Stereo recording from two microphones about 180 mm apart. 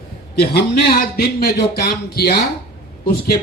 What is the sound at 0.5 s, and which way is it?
Speech, 60° left (ahead or behind).